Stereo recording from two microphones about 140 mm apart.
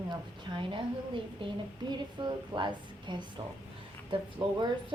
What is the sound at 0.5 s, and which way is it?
A woman's voice, 40° right (ahead or behind).